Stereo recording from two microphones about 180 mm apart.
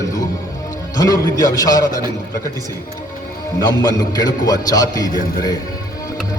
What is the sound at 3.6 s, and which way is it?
A man's voice, 20° left (ahead or behind).